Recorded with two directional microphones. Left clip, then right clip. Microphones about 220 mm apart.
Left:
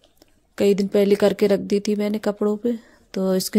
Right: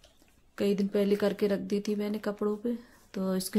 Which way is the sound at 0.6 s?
35° left (ahead or behind).